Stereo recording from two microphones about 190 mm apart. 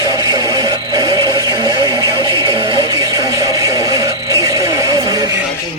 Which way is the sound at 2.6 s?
20° right (ahead or behind).